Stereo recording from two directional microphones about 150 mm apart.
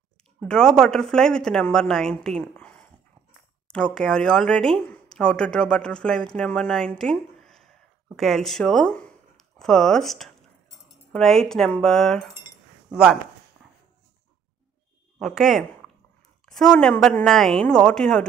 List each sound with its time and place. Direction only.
0.4 s speech: 5° left (ahead or behind)
7.0 s a sound: 5° left (ahead or behind)
8.2 s speech: centre (ahead or behind)
15.1 s speech: centre (ahead or behind)